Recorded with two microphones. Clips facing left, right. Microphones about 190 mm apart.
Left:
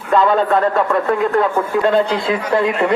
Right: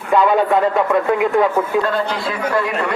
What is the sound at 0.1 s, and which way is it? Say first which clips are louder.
Speech: even; 15° right (ahead or behind).